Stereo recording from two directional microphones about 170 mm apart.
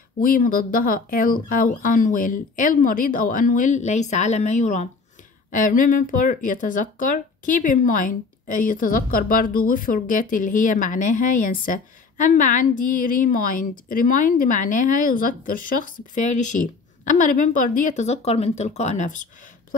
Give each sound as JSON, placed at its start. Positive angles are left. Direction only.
{"t": 0.2, "sound": "speech", "side_deg": 55}